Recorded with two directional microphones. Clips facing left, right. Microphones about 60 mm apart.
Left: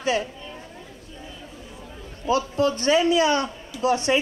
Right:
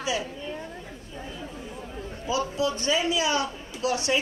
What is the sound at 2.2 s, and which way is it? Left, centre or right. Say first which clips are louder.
A woman's voice: left 5 dB; left.